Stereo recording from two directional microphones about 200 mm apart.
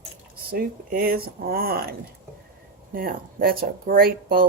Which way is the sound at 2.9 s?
45° right (ahead or behind).